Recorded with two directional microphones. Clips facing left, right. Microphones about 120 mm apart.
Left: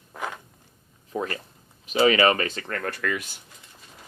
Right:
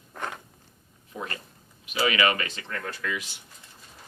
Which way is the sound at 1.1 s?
35° left (ahead or behind).